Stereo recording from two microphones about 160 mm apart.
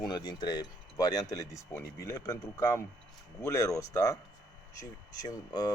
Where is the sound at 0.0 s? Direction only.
25° left (ahead or behind).